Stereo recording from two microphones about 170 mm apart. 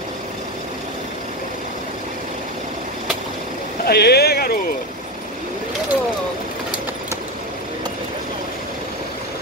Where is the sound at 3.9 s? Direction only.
70° left (ahead or behind).